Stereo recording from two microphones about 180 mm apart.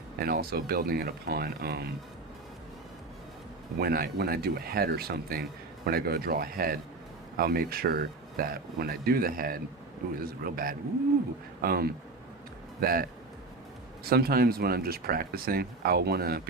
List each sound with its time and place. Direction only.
0.2 s speech: 55° right (ahead or behind)
3.8 s speech: 60° right (ahead or behind)